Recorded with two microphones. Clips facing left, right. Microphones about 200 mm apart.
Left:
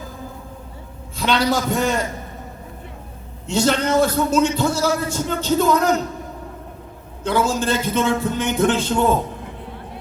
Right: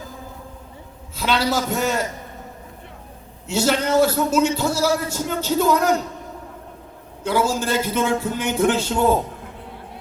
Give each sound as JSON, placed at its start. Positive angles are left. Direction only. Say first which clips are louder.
{"t": 1.1, "sound": "a man's voice", "louder": "left 2 dB", "side_deg": -5}
{"t": 3.4, "sound": "a man's voice", "louder": "left 1 dB", "side_deg": -5}
{"t": 7.3, "sound": "a man's voice", "louder": "left 1 dB", "side_deg": -10}